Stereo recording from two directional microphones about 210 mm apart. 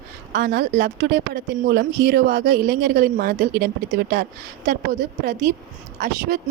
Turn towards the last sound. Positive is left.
turn(degrees=-50)  # may be behind; listen again after turning